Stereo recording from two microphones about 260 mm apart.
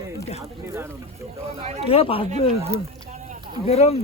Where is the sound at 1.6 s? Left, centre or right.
Right.